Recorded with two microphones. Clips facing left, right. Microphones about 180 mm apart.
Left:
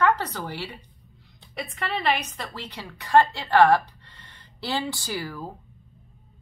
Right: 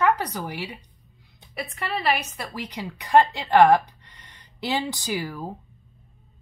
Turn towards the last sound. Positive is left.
turn(degrees=-15)  # may be behind; listen again after turning